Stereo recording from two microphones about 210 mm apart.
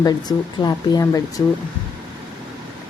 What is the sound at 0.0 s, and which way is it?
Speech, 20° left (ahead or behind).